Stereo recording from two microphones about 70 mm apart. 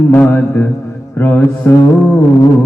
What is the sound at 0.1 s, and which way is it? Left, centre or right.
Mantra, left.